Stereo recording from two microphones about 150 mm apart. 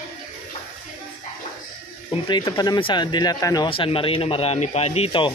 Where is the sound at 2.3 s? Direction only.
30° left (ahead or behind).